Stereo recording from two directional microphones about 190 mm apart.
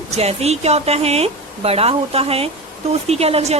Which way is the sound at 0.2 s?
35° right (ahead or behind).